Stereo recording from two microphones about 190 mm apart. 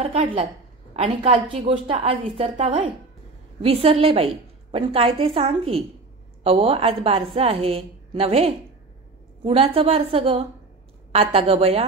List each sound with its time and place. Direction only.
0.0 s a woman's voice: 30° right (ahead or behind)